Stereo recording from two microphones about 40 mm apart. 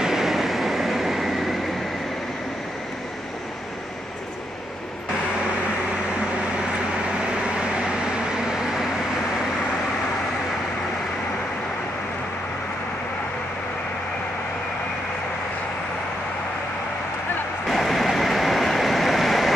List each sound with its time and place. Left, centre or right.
0.0 s train: centre
7.7 s vehicle: centre
17.6 s vehicle: centre